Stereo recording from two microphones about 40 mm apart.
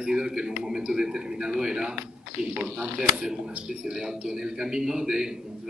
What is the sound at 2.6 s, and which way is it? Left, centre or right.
Speech, right.